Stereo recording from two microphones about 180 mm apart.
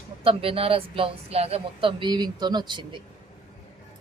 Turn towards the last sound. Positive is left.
turn(degrees=-25)  # may be behind; listen again after turning